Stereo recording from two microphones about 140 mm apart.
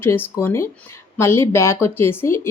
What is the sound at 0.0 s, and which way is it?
Speech, 15° left (ahead or behind).